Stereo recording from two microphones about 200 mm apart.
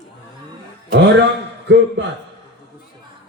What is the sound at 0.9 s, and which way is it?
Speech, 60° right (ahead or behind).